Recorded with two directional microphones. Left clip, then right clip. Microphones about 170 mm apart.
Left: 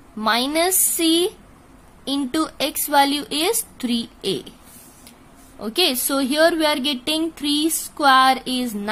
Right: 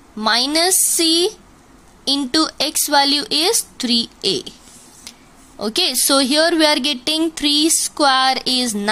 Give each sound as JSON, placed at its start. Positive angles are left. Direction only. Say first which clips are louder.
{"t": 0.2, "sound": "speech", "louder": "right 3 dB", "side_deg": -10}
{"t": 5.6, "sound": "speech", "louder": "right 2 dB", "side_deg": -15}